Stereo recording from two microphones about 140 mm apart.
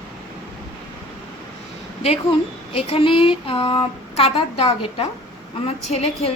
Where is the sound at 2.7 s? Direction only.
40° left (ahead or behind).